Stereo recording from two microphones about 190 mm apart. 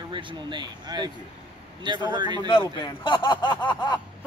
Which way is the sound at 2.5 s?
25° left (ahead or behind).